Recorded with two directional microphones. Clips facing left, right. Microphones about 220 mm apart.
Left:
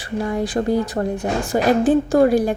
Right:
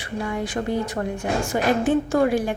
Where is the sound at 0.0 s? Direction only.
35° left (ahead or behind).